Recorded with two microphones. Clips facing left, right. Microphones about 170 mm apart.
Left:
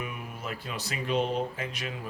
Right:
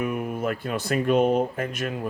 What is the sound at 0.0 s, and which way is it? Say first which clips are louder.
Speech: right 11 dB; 50° right (ahead or behind).